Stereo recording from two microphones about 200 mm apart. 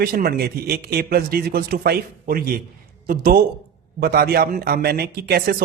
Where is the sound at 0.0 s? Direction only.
50° right (ahead or behind).